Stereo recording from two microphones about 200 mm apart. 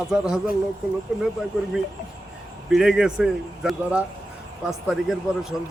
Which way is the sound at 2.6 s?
Centre (ahead or behind).